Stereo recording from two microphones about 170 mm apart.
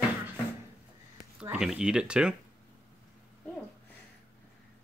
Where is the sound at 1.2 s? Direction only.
5° right (ahead or behind).